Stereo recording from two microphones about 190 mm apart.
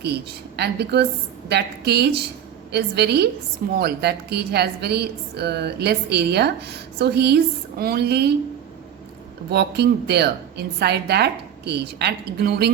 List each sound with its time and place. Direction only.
0.0 s a woman's voice: 60° right (ahead or behind)
9.5 s a woman's voice: 60° right (ahead or behind)